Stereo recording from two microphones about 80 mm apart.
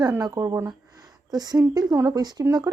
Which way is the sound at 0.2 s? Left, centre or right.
Right.